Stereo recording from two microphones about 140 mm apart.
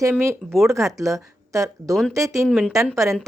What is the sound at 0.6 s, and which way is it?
Speech, 20° right (ahead or behind).